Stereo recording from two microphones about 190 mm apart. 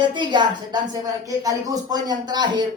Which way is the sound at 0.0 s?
25° right (ahead or behind).